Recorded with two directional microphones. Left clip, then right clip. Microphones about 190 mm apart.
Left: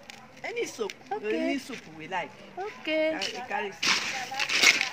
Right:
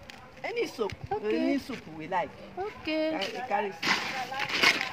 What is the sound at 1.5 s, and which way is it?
Speech, 10° right (ahead or behind).